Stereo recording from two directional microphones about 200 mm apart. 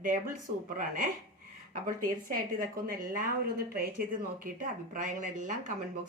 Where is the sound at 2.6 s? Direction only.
45° right (ahead or behind).